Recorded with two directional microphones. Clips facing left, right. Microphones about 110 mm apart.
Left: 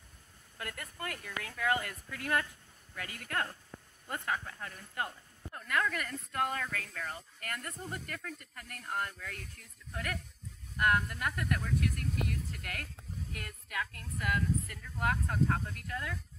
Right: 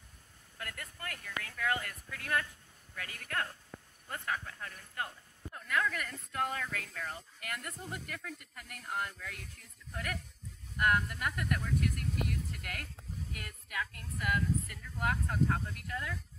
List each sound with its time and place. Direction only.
0.6 s speech: 10° left (ahead or behind); by 9.4 s 5° right (ahead or behind)
10.8 s speech: centre (ahead or behind)